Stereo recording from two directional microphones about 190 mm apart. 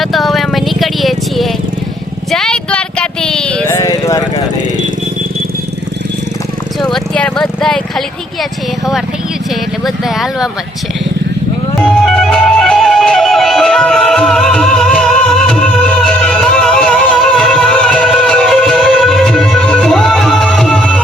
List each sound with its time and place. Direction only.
0.0 s vehicle: centre (ahead or behind)
2.3 s a sound: 5° left (ahead or behind)
3.7 s vehicle: 15° left (ahead or behind)
6.7 s a sound: 5° left (ahead or behind)
9.8 s speech: centre (ahead or behind)
11.8 s music: 5° left (ahead or behind)